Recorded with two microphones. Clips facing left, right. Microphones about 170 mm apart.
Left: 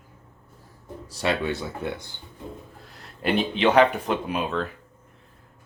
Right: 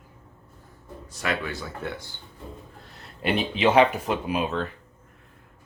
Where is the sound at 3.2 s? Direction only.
Centre (ahead or behind).